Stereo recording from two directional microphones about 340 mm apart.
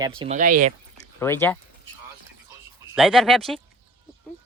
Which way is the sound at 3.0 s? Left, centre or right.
Centre.